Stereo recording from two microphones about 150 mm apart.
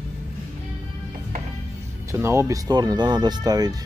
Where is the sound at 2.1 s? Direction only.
20° right (ahead or behind).